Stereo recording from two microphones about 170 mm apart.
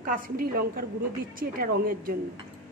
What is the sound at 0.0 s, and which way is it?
A woman's voice, 55° right (ahead or behind).